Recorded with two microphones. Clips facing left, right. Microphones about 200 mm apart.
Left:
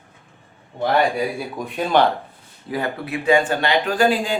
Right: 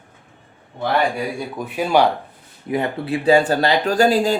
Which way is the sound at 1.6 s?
5° right (ahead or behind).